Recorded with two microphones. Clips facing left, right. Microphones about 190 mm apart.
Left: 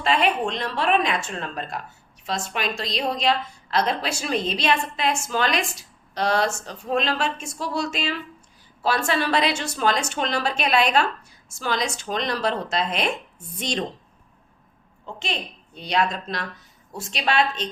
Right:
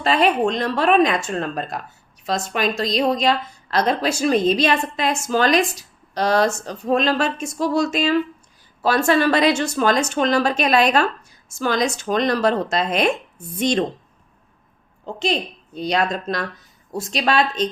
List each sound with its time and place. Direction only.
0.0 s a woman's voice: 40° right (ahead or behind)
15.0 s a woman's voice: 35° right (ahead or behind)